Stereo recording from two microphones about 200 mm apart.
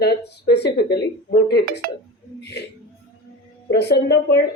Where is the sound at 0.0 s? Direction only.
55° left (ahead or behind).